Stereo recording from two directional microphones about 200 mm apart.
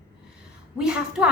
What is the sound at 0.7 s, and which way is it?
Speech, 5° right (ahead or behind).